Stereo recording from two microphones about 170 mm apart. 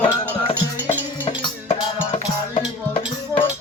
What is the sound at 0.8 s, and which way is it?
Music, 30° left (ahead or behind).